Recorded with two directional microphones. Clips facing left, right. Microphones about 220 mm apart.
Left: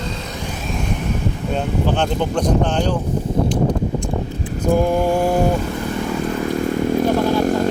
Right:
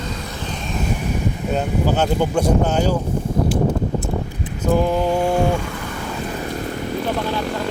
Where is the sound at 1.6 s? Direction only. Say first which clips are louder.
Even; 5° right (ahead or behind).